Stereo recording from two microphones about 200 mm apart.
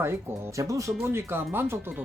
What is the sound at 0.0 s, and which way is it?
Speech, 10° right (ahead or behind).